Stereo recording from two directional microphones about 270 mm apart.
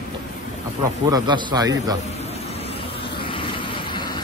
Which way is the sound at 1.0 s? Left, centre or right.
Centre.